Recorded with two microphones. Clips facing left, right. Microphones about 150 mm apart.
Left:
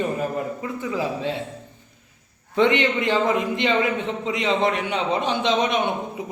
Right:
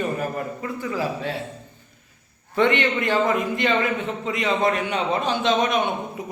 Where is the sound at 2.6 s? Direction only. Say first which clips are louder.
Left 1 dB; 15° left (ahead or behind).